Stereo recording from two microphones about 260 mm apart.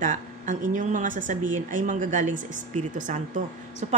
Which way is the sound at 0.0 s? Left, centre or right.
Right.